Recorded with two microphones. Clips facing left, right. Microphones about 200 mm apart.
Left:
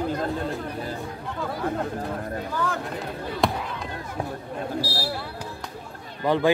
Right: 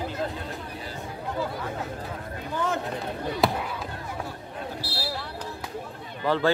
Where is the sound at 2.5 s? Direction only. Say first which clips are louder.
Right 2 dB; 20° right (ahead or behind).